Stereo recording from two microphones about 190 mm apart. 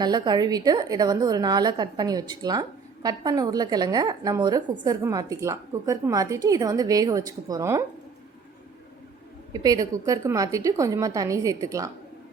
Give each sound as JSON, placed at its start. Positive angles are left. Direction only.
{"t": 0.0, "sound": "a woman's voice", "side_deg": -20}
{"t": 9.5, "sound": "a woman's voice", "side_deg": -20}